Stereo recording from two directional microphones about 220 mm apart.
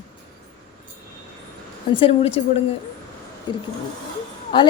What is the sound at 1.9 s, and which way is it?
A woman's voice, 25° left (ahead or behind).